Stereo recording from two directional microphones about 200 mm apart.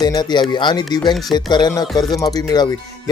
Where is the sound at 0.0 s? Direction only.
20° left (ahead or behind).